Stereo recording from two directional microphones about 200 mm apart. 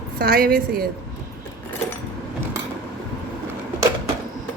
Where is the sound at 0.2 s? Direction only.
50° right (ahead or behind).